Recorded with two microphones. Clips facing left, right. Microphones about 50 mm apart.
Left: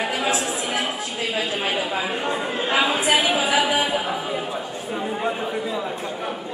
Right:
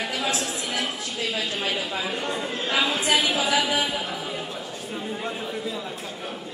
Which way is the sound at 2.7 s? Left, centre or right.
Left.